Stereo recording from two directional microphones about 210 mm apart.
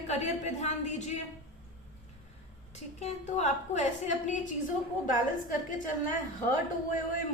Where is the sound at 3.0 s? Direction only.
35° left (ahead or behind).